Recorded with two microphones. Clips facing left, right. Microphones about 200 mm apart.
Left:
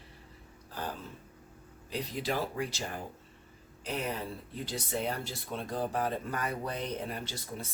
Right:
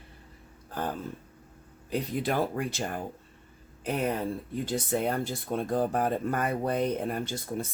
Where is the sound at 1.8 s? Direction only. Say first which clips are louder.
Right 5 dB; 55° right (ahead or behind).